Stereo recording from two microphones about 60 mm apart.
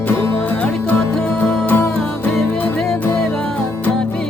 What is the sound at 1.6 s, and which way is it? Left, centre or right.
Music, left.